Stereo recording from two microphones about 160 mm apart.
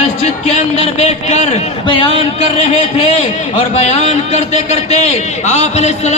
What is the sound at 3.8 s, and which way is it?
Speech, 40° left (ahead or behind).